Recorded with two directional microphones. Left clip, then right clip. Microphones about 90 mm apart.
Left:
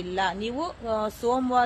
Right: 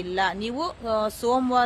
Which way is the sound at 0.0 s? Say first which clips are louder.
Right 2 dB; 40° right (ahead or behind).